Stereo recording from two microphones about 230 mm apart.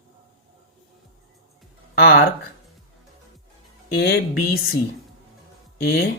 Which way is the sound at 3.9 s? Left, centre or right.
Left.